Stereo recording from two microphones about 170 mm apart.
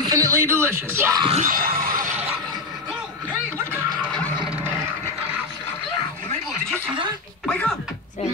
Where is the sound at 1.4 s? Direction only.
55° right (ahead or behind).